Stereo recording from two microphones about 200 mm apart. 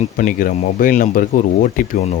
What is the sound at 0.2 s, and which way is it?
Speech, 45° left (ahead or behind).